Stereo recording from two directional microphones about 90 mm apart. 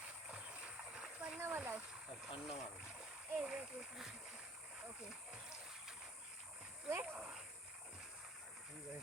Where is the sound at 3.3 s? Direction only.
5° right (ahead or behind).